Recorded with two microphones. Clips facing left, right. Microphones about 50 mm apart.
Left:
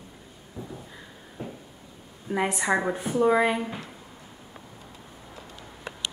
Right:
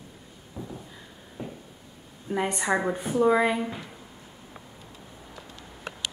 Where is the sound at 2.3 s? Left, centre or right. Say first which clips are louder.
Left 1 dB; centre.